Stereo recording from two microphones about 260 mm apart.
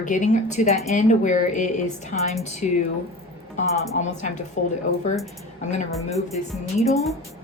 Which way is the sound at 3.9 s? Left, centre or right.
Left.